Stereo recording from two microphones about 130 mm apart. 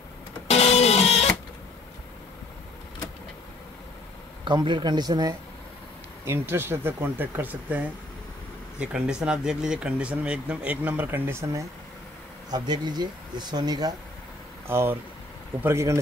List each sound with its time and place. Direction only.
0.5 s printer: 55° left (ahead or behind)
4.5 s speech: 35° right (ahead or behind)
6.2 s speech: 20° right (ahead or behind)
12.4 s speech: 30° right (ahead or behind)
14.7 s speech: 20° right (ahead or behind)